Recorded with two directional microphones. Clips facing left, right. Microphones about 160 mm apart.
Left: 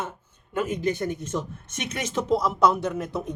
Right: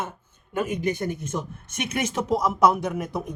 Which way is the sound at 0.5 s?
15° right (ahead or behind).